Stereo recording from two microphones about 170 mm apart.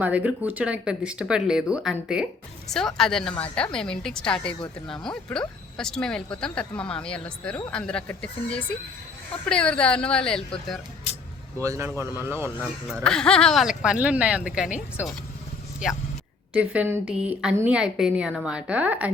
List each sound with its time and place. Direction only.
0.0 s speech: 10° right (ahead or behind)
11.6 s a woman's voice: 15° right (ahead or behind)
12.9 s speech: 5° left (ahead or behind)
16.6 s a woman's voice: 10° right (ahead or behind)